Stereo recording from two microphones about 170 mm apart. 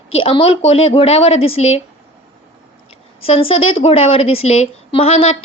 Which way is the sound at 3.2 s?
35° left (ahead or behind).